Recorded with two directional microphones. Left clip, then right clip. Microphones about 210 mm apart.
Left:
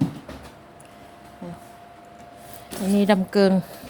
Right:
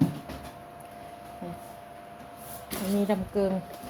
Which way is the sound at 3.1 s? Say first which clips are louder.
Left 11 dB; 45° left (ahead or behind).